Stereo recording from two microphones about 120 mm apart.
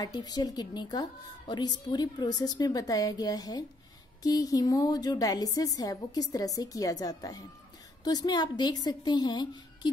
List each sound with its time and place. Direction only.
0.0 s a woman's voice: 35° left (ahead or behind)